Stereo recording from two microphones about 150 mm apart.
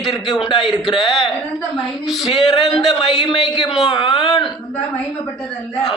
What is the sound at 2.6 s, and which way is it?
Speech, centre (ahead or behind).